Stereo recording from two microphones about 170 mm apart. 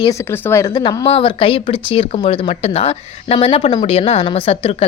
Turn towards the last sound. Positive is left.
turn(degrees=35)  # may be behind; listen again after turning